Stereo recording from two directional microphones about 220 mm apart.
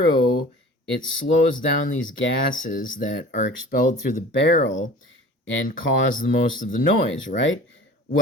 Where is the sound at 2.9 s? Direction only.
60° left (ahead or behind).